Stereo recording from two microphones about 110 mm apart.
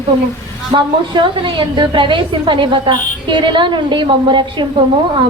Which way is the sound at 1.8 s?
45° right (ahead or behind).